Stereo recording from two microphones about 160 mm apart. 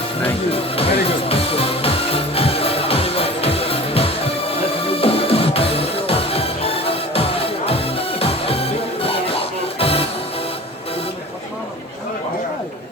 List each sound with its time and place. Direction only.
0.2 s speech: 35° left (ahead or behind)
1.0 s music: 35° left (ahead or behind)